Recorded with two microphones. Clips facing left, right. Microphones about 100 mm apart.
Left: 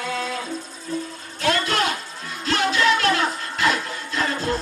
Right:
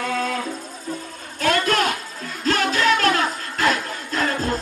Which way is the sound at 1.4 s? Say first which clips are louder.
Right 2 dB; 45° right (ahead or behind).